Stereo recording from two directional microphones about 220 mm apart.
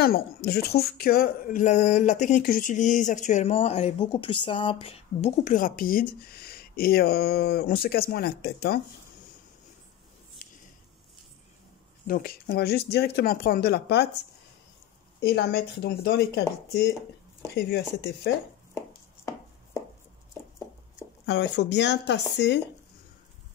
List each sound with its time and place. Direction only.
0.5 s speech: 45° left (ahead or behind)
10.4 s a sound: 35° left (ahead or behind)
12.1 s speech: 40° left (ahead or behind)
15.1 s speech: 45° left (ahead or behind)
18.8 s chopping: 15° left (ahead or behind)
21.3 s speech: 50° left (ahead or behind)